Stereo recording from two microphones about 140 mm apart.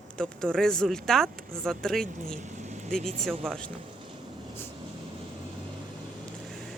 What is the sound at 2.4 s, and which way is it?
Vehicle, 55° right (ahead or behind).